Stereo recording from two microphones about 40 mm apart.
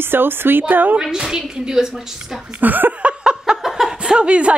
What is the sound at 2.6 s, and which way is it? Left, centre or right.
Speech, right.